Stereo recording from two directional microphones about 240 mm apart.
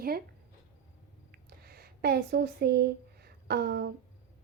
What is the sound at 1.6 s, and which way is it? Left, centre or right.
Speech, right.